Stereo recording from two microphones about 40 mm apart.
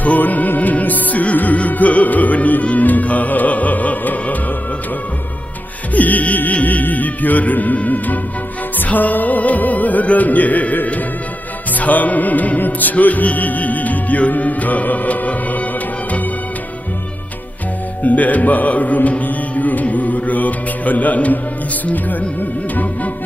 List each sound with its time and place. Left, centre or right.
0.0 s music: left
5.9 s music: left
18.0 s speech: left
22.4 s music: left